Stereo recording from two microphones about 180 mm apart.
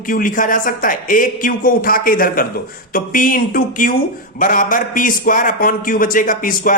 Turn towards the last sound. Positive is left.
turn(degrees=50)  # may be behind; listen again after turning